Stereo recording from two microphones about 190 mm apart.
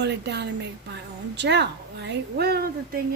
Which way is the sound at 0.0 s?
65° right (ahead or behind).